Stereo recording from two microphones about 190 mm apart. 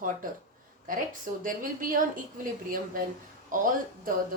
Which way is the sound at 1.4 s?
45° right (ahead or behind).